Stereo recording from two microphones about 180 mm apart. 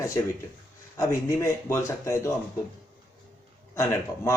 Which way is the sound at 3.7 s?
15° left (ahead or behind).